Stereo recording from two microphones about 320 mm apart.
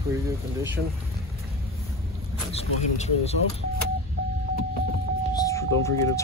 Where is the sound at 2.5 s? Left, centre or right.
Centre.